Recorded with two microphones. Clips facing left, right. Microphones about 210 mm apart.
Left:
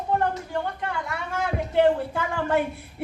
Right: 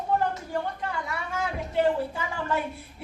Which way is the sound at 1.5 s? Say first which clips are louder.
Left 4 dB; 60° left (ahead or behind).